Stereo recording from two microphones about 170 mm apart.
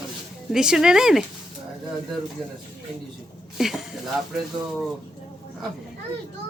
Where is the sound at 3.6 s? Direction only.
Centre (ahead or behind).